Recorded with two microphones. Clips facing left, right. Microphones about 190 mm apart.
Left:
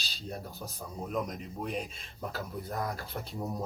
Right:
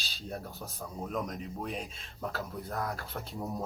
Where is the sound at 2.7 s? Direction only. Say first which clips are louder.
Even; 15° left (ahead or behind).